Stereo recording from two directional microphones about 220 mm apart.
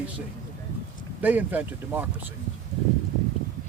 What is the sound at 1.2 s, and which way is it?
Speech, 10° right (ahead or behind).